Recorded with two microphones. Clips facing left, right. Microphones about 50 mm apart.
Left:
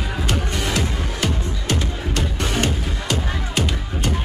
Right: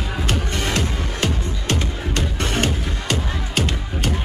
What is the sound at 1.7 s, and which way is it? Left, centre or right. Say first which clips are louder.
Music: even; right.